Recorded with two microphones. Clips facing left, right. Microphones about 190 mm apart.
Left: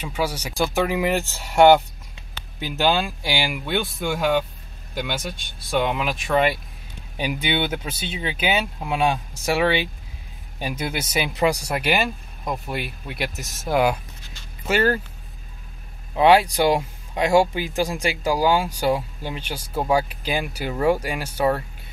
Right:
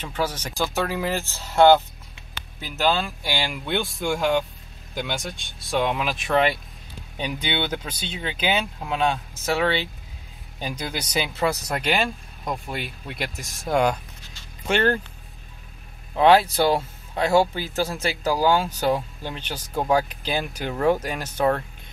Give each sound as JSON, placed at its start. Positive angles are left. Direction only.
{"t": 0.0, "sound": "speech", "side_deg": 10}
{"t": 16.2, "sound": "speech", "side_deg": 10}